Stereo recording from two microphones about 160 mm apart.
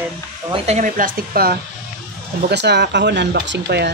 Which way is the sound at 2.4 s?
90° right.